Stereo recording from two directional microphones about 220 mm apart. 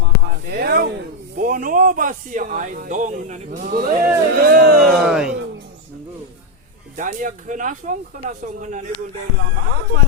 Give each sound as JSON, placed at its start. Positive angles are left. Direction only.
{"t": 0.5, "sound": "a man's voice", "side_deg": -45}
{"t": 4.8, "sound": "speech", "side_deg": 0}
{"t": 6.9, "sound": "a man's voice", "side_deg": -35}